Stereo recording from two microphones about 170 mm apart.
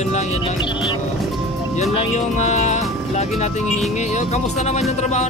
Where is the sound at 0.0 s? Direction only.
40° left (ahead or behind).